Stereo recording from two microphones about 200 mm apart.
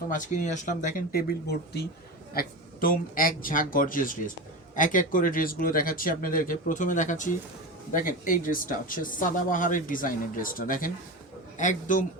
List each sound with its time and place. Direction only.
0.1 s speech: 40° left (ahead or behind)